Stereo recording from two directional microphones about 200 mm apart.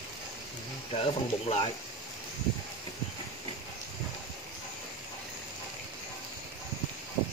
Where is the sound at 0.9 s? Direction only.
30° left (ahead or behind).